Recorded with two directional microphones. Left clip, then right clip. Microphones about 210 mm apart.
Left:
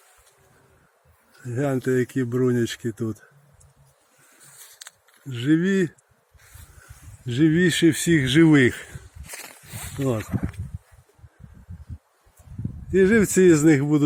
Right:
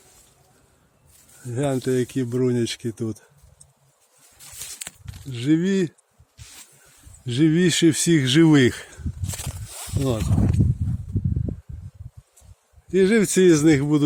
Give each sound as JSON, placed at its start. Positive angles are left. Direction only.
{"t": 1.5, "sound": "speech", "side_deg": -10}
{"t": 5.3, "sound": "speech", "side_deg": -15}
{"t": 7.3, "sound": "speech", "side_deg": -15}
{"t": 9.3, "sound": "a sound", "side_deg": -35}
{"t": 10.2, "sound": "speech", "side_deg": -25}
{"t": 12.9, "sound": "speech", "side_deg": -5}